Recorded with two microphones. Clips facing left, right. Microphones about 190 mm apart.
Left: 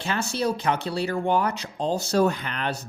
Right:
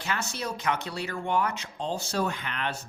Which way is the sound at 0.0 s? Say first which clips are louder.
Left 7 dB; 30° left (ahead or behind).